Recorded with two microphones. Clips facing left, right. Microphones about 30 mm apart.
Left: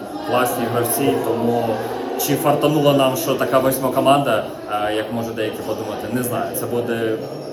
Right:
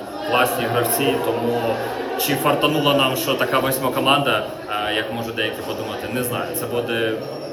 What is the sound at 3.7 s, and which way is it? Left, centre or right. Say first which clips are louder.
Speech: left 3 dB; right.